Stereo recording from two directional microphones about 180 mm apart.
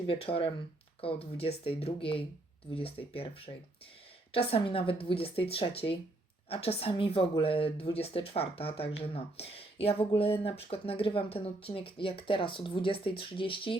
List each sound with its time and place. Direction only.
0.1 s a woman's voice: 30° left (ahead or behind)